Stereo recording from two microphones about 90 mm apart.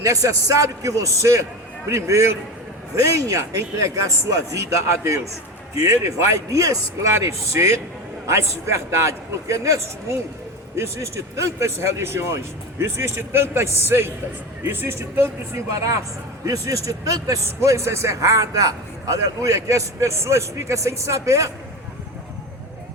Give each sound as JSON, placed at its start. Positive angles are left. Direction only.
{"t": 0.0, "sound": "speech", "side_deg": -40}
{"t": 15.7, "sound": "speech", "side_deg": -40}